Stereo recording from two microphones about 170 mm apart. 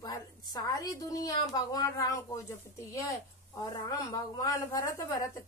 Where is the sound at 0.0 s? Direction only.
25° left (ahead or behind).